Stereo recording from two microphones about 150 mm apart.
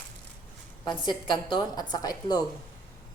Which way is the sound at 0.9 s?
30° left (ahead or behind).